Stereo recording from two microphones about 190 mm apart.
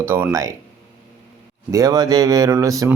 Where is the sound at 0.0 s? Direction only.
10° right (ahead or behind).